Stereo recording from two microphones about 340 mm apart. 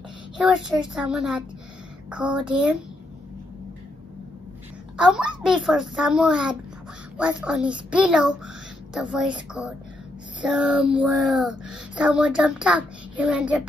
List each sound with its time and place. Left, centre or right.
0.4 s a woman's voice: centre
4.9 s speech: centre
9.5 s speech: centre